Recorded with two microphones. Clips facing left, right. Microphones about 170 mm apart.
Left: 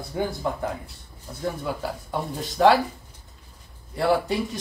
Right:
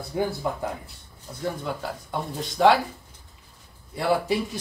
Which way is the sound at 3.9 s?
Centre (ahead or behind).